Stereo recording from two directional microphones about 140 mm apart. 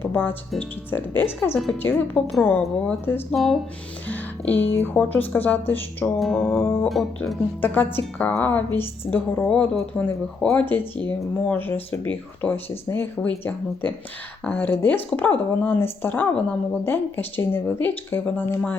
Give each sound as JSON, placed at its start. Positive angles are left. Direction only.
{"t": 0.0, "sound": "a woman's voice", "side_deg": 15}
{"t": 3.3, "sound": "speech", "side_deg": 0}
{"t": 4.1, "sound": "a woman's voice", "side_deg": 15}
{"t": 6.1, "sound": "speech", "side_deg": 0}
{"t": 7.6, "sound": "a woman's voice", "side_deg": 15}